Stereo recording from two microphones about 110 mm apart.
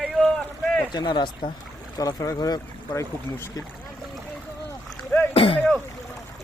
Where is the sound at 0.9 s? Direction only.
40° left (ahead or behind).